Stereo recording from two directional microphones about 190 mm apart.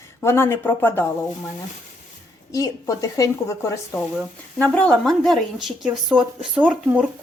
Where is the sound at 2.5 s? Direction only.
15° left (ahead or behind).